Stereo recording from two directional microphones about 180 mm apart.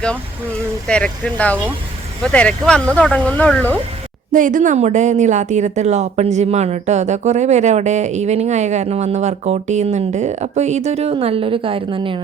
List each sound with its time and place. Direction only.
0.9 s speech: 5° left (ahead or behind)
4.3 s a woman's voice: 45° right (ahead or behind); by 12.2 s 30° right (ahead or behind)